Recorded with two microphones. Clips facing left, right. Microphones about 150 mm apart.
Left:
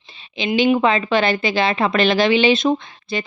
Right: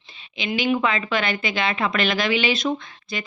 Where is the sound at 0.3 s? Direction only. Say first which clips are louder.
Left 6 dB; 30° left (ahead or behind).